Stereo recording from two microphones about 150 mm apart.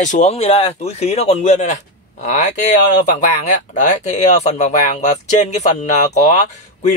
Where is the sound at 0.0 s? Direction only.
50° left (ahead or behind).